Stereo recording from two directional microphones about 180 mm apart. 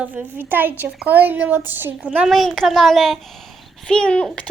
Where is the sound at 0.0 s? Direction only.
10° right (ahead or behind).